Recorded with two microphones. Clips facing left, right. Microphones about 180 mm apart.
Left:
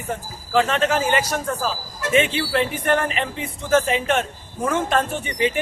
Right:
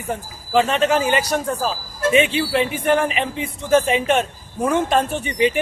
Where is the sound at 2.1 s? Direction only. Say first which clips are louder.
Right 1 dB; 15° right (ahead or behind).